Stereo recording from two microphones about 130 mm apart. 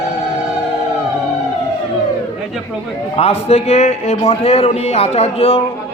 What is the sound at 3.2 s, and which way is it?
A man's voice, 50° left (ahead or behind).